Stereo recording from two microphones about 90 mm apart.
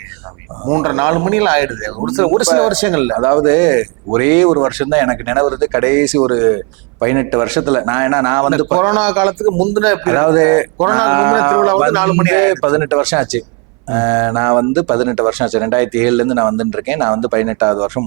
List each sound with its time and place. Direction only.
0.7 s speech: 15° right (ahead or behind)